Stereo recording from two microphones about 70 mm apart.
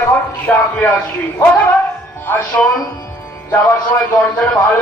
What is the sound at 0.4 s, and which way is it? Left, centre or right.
Speech, left.